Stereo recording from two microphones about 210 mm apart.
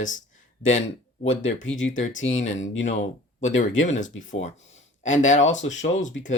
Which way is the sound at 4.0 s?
35° left (ahead or behind).